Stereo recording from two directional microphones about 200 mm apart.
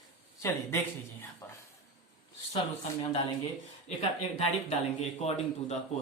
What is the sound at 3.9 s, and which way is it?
Speech, 35° left (ahead or behind).